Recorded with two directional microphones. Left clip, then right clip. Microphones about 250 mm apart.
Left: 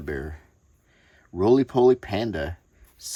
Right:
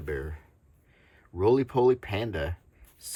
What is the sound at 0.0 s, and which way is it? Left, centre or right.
Speech, centre.